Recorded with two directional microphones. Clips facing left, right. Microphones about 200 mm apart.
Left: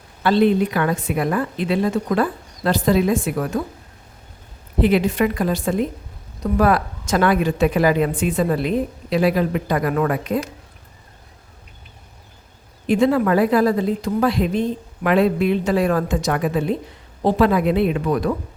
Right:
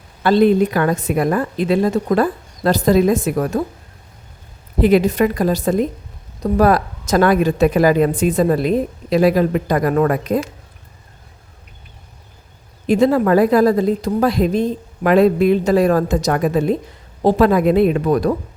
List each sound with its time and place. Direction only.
0.2 s a woman's voice: 45° right (ahead or behind)
4.8 s speech: 40° right (ahead or behind)
12.9 s speech: 40° right (ahead or behind)